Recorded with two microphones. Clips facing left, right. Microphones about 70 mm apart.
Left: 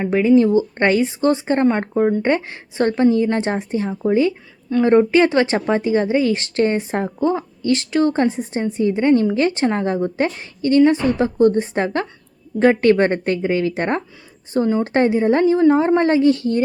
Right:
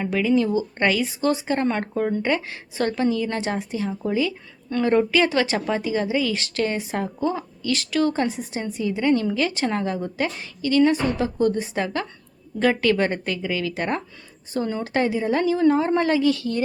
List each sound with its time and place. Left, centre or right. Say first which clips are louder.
0.0 s speech: left 7 dB; left
2.2 s speech: left 5 dB; left
15.6 s speech: left 5 dB; left